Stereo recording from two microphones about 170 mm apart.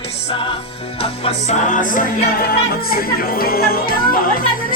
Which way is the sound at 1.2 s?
45° left (ahead or behind).